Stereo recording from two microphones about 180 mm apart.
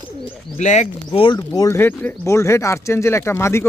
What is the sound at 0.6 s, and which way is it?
Speech, 40° left (ahead or behind).